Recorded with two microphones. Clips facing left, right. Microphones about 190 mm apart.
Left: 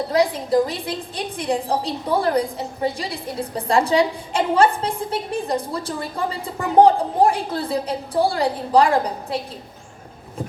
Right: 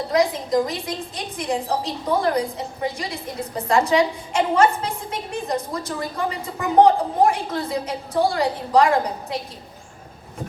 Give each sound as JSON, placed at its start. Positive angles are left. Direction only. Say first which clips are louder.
{"t": 0.1, "sound": "a woman's voice", "louder": "left 1 dB", "side_deg": 30}